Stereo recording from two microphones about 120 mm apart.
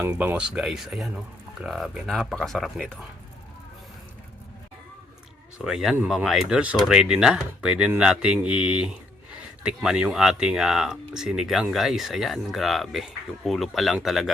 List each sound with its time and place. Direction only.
0.0 s speech: 20° right (ahead or behind); by 3.0 s 5° left (ahead or behind)
5.5 s speech: 5° right (ahead or behind)